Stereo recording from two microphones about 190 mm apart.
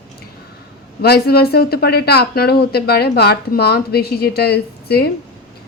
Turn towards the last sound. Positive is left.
turn(degrees=55)  # may be behind; listen again after turning